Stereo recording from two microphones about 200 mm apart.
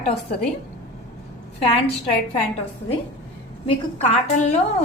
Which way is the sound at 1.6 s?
30° left (ahead or behind).